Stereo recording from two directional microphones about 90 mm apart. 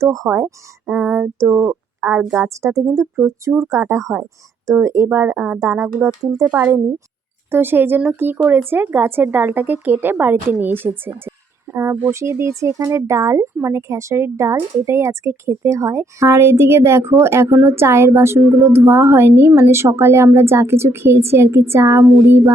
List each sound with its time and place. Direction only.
0.0 s a woman's voice: 40° right (ahead or behind)
1.0 s female singing: 15° right (ahead or behind)
1.4 s a woman's voice: 35° right (ahead or behind)
7.5 s a woman's voice: 25° right (ahead or behind)